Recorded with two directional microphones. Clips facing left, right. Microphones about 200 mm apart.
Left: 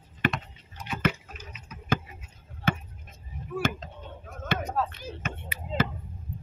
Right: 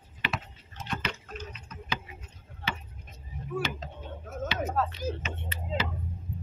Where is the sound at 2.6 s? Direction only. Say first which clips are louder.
Left 8 dB; 50° left (ahead or behind).